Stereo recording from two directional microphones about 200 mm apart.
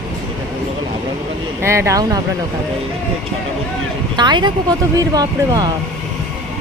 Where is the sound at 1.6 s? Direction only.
15° right (ahead or behind).